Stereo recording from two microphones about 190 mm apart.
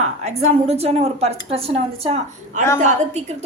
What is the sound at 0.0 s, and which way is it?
A woman's voice, 35° right (ahead or behind).